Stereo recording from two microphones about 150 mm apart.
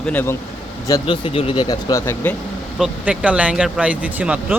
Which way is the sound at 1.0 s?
35° left (ahead or behind).